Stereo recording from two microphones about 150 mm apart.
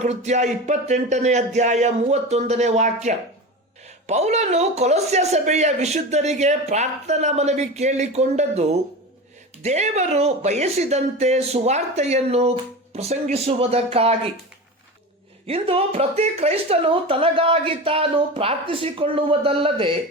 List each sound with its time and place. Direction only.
0.0 s a man's voice: 50° right (ahead or behind)
15.4 s speech: 40° right (ahead or behind)